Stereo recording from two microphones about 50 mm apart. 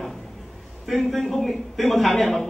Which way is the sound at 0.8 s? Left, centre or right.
Centre.